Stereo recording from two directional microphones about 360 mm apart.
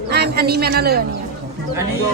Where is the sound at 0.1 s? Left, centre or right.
Right.